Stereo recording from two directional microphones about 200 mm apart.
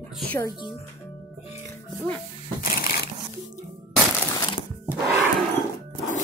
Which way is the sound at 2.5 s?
50° left (ahead or behind).